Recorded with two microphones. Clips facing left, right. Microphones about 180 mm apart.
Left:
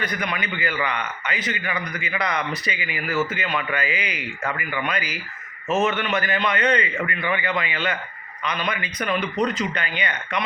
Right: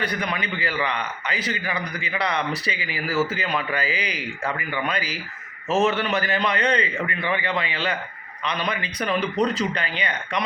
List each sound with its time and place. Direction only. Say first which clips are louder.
0.0 s a man's voice: right 1 dB; 30° right (ahead or behind)